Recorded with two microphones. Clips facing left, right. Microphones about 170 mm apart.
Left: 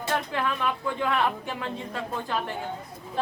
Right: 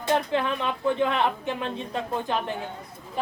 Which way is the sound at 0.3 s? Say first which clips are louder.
Right 2 dB; 25° right (ahead or behind).